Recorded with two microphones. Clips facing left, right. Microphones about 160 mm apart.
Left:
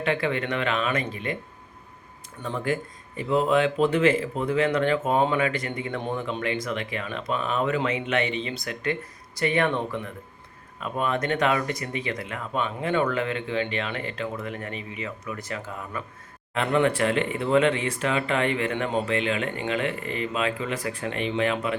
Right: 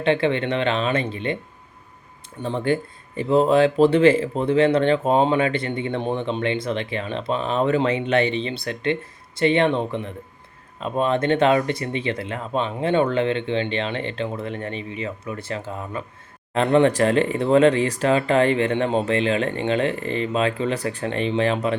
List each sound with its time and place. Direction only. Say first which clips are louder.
0.0 s speech: right 6 dB; 25° right (ahead or behind)
2.4 s speech: right 5 dB; 30° right (ahead or behind)